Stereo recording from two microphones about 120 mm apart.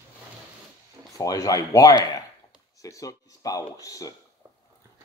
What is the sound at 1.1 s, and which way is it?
Speech, 30° left (ahead or behind).